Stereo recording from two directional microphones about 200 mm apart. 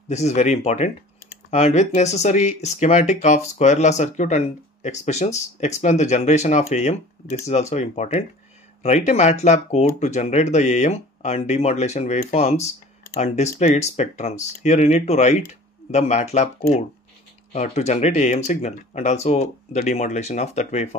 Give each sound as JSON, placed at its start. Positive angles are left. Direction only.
{"t": 0.1, "sound": "speech", "side_deg": 35}